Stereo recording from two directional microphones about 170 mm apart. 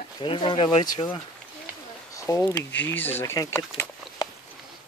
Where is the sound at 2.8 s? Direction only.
10° left (ahead or behind).